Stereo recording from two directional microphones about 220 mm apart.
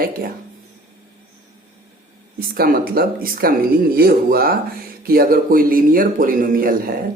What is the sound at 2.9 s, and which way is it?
Speech, 40° right (ahead or behind).